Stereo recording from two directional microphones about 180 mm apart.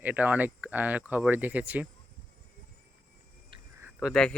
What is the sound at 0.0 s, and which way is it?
Speech, 10° right (ahead or behind).